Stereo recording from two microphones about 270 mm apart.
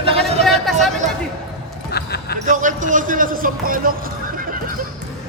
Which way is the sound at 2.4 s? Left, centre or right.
Right.